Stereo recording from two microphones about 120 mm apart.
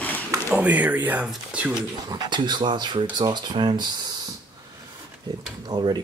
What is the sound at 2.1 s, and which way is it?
Speech, 40° right (ahead or behind).